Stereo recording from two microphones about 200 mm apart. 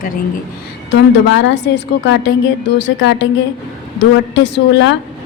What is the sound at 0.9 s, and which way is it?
A woman's voice, 65° left (ahead or behind).